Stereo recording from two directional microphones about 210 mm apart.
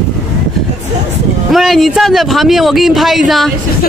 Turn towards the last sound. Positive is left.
turn(degrees=0)  # may be behind; listen again after turning